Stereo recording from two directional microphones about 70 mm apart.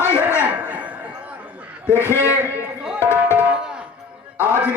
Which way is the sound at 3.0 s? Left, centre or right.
Left.